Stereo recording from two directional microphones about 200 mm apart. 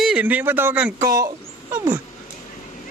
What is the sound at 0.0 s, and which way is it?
Speech, 5° right (ahead or behind).